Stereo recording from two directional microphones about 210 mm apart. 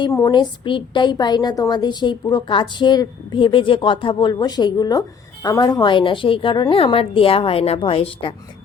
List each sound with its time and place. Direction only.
0.0 s a woman's voice: 20° left (ahead or behind)